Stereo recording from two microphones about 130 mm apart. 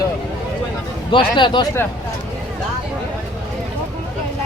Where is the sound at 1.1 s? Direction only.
40° left (ahead or behind).